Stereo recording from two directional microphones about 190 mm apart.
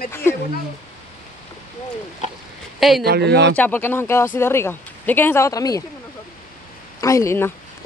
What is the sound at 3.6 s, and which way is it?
Speech, 10° left (ahead or behind).